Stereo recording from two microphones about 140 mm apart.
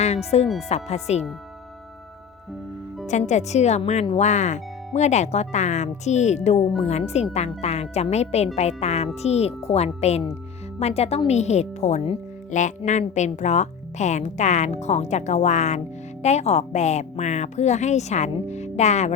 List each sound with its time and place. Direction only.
0.0 s speech: 50° left (ahead or behind)
3.1 s speech: 55° left (ahead or behind)